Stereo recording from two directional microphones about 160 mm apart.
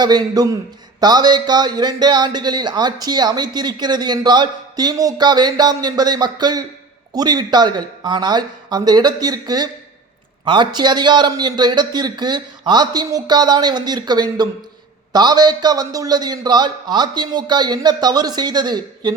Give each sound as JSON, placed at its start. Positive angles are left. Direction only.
{"t": 0.0, "sound": "a man's voice", "side_deg": -25}